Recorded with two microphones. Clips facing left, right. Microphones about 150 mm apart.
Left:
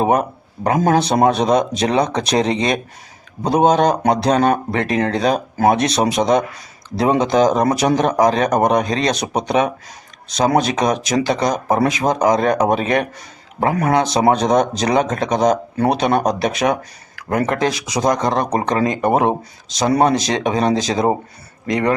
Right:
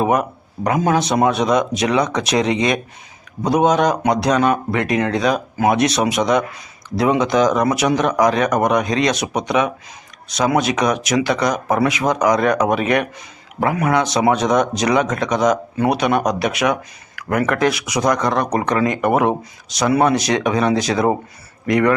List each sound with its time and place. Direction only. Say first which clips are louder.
0.0 s speech: left 1 dB; 30° left (ahead or behind)